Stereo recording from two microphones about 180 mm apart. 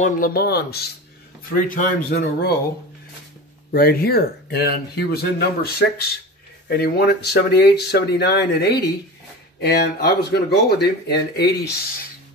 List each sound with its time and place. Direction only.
0.0 s speech: 55° left (ahead or behind)
1.5 s speech: 50° left (ahead or behind)
3.7 s speech: 55° left (ahead or behind)